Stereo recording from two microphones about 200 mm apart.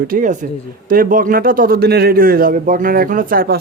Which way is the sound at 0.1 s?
40° right (ahead or behind).